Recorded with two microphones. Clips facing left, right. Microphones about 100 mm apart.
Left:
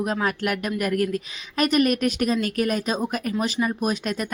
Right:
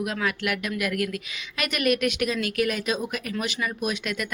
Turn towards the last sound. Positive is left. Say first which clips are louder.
# left 3 dB
turn(degrees=40)  # may be behind; listen again after turning